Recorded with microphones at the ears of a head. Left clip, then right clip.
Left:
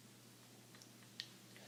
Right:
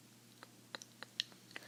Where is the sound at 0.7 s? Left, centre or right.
Right.